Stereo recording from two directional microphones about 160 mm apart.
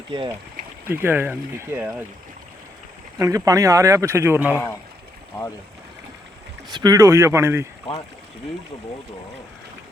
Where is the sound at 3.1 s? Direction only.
20° right (ahead or behind).